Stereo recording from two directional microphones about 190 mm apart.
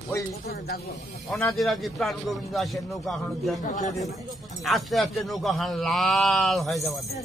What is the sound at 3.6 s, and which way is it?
Speech, 40° left (ahead or behind).